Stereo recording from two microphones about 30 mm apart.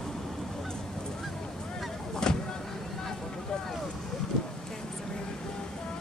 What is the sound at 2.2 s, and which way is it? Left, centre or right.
Vehicle, left.